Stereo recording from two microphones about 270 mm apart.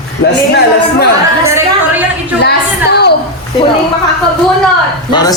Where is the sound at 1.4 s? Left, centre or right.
Centre.